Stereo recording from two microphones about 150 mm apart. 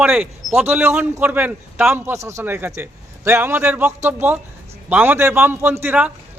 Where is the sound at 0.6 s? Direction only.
15° right (ahead or behind).